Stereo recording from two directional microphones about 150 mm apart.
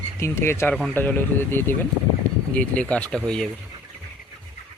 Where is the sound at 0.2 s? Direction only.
15° left (ahead or behind).